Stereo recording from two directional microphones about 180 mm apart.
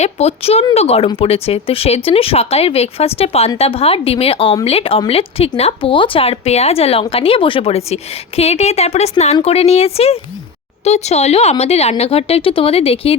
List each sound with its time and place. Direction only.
0.0 s speech: 35° left (ahead or behind)